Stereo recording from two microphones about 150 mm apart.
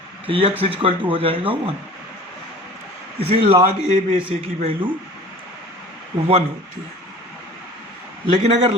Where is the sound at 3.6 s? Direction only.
55° right (ahead or behind).